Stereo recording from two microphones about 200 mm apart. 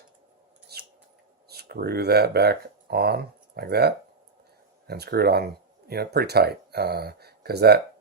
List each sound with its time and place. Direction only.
0.7 s scissors: 55° right (ahead or behind)
1.5 s speech: 50° right (ahead or behind)